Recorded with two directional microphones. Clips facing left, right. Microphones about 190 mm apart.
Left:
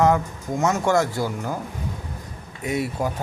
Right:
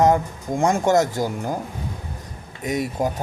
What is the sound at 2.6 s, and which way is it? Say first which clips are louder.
Speech: right 1 dB; 40° right (ahead or behind).